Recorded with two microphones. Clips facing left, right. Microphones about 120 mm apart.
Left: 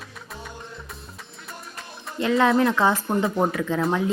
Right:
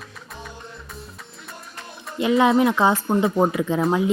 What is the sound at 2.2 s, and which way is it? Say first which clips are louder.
Speech: right 2 dB; 15° right (ahead or behind).